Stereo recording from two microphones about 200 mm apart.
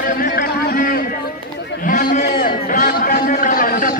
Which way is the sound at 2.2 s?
45° left (ahead or behind).